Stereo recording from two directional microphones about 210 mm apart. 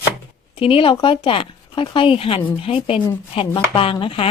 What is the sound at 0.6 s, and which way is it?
Speech, 25° left (ahead or behind).